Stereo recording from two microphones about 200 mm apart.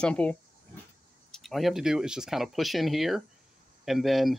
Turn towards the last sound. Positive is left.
turn(degrees=0)  # may be behind; listen again after turning